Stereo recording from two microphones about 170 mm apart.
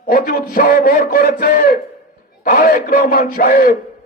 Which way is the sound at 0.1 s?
65° left (ahead or behind).